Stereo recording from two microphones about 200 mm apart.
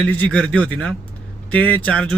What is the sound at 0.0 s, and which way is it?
Speech, 5° left (ahead or behind).